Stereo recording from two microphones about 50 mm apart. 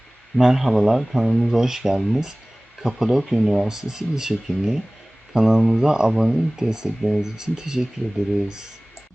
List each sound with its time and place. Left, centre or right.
0.3 s speech: centre
1.3 s speech: centre
1.5 s speech: centre